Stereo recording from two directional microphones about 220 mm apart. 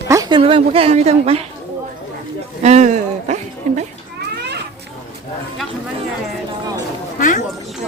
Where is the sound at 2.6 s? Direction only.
30° right (ahead or behind).